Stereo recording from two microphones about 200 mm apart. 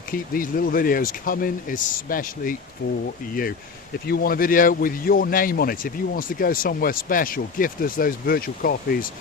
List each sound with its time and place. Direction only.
0.1 s speech: 45° left (ahead or behind)
4.0 s speech: 50° left (ahead or behind)